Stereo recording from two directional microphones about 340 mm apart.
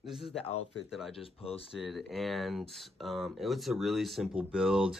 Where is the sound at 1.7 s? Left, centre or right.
Centre.